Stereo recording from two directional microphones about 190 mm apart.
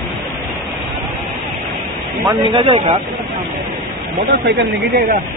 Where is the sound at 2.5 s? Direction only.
25° right (ahead or behind).